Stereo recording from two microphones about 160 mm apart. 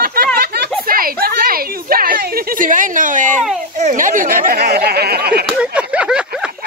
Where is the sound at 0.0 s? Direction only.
70° right (ahead or behind).